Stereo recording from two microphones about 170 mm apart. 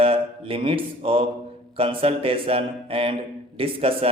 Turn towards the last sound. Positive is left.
turn(degrees=-35)  # may be behind; listen again after turning